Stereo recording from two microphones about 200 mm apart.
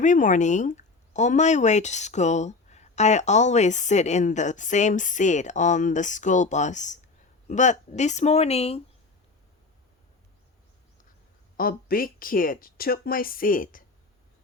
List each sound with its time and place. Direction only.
0.0 s speech: 40° left (ahead or behind)
11.5 s speech: 45° left (ahead or behind)